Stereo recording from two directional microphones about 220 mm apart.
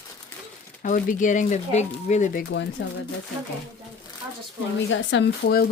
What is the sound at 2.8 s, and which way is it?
Speech, 55° left (ahead or behind).